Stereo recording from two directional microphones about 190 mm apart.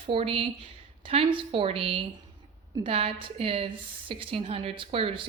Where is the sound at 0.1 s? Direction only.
30° right (ahead or behind).